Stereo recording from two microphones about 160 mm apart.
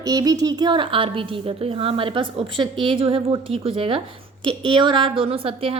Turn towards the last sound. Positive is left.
turn(degrees=-35)  # may be behind; listen again after turning